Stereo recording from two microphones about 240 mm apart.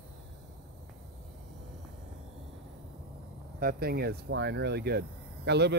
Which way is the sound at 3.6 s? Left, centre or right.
Right.